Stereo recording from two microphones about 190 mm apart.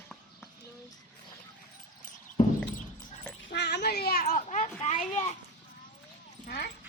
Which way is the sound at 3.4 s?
60° left (ahead or behind).